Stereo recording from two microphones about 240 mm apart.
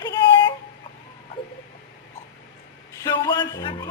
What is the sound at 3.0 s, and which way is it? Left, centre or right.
Speech, centre.